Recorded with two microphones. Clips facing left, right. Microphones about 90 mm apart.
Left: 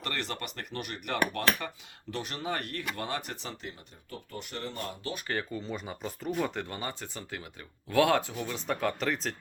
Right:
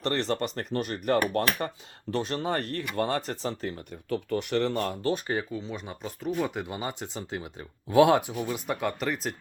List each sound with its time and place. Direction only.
0.0 s speech: 30° right (ahead or behind)
4.1 s speech: 70° right (ahead or behind)
5.5 s speech: centre (ahead or behind)